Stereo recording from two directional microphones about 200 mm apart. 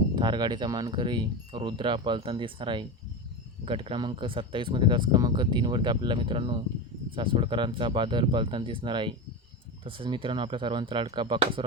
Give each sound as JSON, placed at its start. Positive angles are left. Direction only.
{"t": 0.2, "sound": "speech", "side_deg": -20}